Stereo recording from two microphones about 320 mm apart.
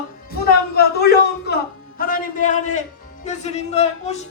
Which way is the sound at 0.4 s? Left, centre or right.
Left.